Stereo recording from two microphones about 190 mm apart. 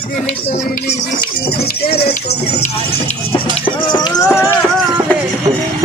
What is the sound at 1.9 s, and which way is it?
Speech, 55° left (ahead or behind).